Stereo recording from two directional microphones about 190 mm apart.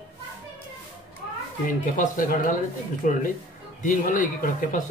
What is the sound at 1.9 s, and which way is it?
Speech, 45° left (ahead or behind).